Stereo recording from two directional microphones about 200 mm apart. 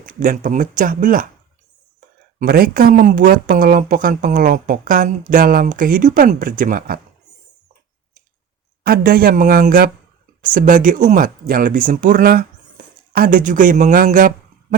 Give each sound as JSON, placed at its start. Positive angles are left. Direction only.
{"t": 0.0, "sound": "speech", "side_deg": -45}
{"t": 2.4, "sound": "speech", "side_deg": -50}
{"t": 8.8, "sound": "speech", "side_deg": -50}